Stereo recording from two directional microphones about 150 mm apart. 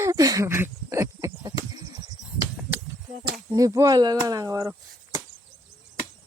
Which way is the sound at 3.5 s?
25° right (ahead or behind).